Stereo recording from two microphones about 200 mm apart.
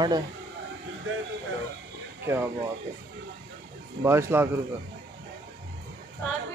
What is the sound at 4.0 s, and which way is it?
Speech, 10° right (ahead or behind).